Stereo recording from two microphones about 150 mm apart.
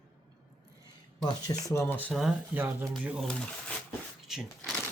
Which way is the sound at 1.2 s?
20° left (ahead or behind).